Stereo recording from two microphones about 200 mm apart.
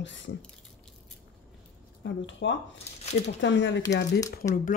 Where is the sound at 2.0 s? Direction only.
65° left (ahead or behind).